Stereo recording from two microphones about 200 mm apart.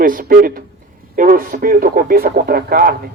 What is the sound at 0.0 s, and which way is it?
A man's voice, 45° right (ahead or behind).